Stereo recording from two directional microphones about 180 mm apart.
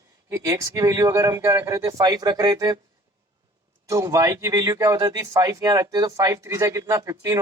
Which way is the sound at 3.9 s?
15° right (ahead or behind).